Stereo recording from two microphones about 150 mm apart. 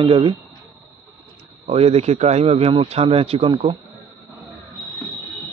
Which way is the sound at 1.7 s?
45° right (ahead or behind).